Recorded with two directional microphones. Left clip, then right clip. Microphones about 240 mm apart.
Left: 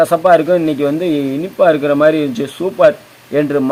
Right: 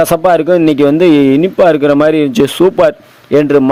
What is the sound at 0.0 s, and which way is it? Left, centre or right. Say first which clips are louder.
A man's voice: right 1 dB; right.